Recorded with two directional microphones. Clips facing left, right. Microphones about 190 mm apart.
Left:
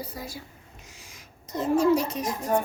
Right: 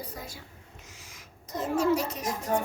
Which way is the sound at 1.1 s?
15° left (ahead or behind).